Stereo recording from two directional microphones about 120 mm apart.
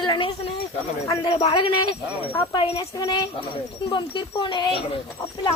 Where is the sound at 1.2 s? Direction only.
50° left (ahead or behind).